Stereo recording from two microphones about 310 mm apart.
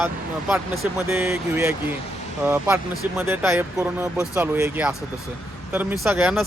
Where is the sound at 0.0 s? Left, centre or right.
Centre.